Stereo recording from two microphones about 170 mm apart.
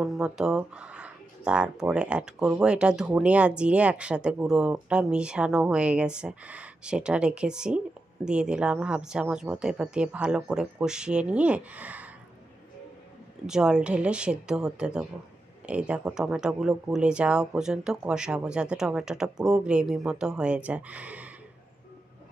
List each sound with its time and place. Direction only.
0.0 s speech: 5° right (ahead or behind)
13.5 s speech: 5° right (ahead or behind)